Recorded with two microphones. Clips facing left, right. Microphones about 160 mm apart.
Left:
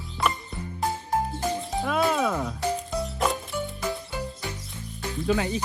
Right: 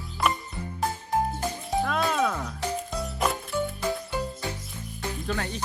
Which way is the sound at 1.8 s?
5° left (ahead or behind).